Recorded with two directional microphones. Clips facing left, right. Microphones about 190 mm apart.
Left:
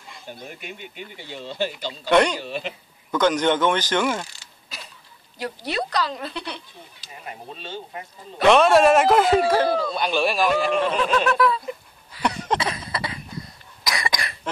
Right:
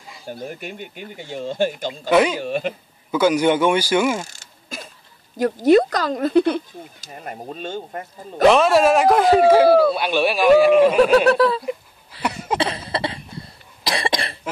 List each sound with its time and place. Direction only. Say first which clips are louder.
0.3 s speech: right 7 dB; 45° right (ahead or behind)
2.0 s a man's voice: right 2 dB; 5° right (ahead or behind)
2.4 s speech: right 7 dB; 50° right (ahead or behind)
3.1 s speech: right 3 dB; 10° right (ahead or behind)
4.3 s mechanisms: right 8 dB; 45° right (ahead or behind)
5.4 s speech: right 14 dB; 45° right (ahead or behind)
8.5 s a man's voice: right 1 dB; centre (ahead or behind)
9.5 s a man's voice: right 8 dB; 10° right (ahead or behind)
11.0 s laughter: right 7 dB; 35° right (ahead or behind)
12.2 s a sound: even; 5° right (ahead or behind)
12.5 s cough: right 4 dB; 30° right (ahead or behind)